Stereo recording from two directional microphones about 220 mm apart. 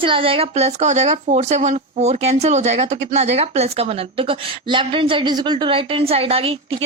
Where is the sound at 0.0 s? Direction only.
25° right (ahead or behind).